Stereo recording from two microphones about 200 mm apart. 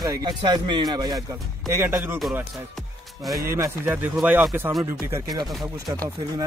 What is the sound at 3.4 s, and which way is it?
Speech, 15° right (ahead or behind).